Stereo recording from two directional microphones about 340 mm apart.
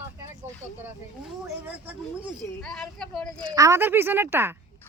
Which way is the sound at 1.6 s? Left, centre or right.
Centre.